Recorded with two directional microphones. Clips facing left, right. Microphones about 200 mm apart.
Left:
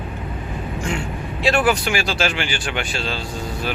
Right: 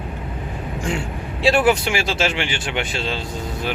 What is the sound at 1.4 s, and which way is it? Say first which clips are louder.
Speech: right 2 dB; 30° right (ahead or behind).